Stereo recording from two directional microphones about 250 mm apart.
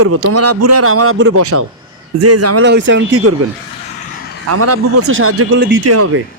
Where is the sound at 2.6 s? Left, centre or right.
Right.